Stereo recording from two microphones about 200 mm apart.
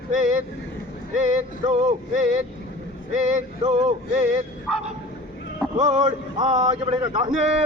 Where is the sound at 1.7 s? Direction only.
35° right (ahead or behind).